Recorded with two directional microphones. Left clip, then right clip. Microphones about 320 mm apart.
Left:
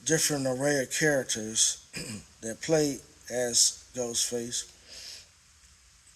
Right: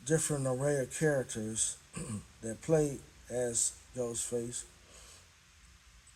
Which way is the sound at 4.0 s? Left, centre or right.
Left.